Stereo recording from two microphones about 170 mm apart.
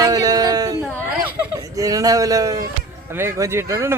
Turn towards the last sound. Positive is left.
turn(degrees=-15)  # may be behind; listen again after turning